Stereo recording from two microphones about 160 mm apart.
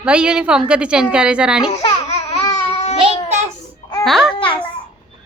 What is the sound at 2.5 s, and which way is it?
Babbling, 40° left (ahead or behind).